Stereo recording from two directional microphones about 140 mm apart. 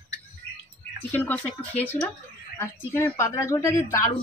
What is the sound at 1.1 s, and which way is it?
A woman's voice, 10° left (ahead or behind).